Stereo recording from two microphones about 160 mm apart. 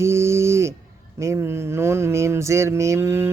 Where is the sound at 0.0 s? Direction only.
15° right (ahead or behind).